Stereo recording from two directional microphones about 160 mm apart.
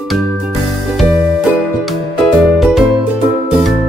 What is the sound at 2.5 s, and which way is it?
Music, centre (ahead or behind).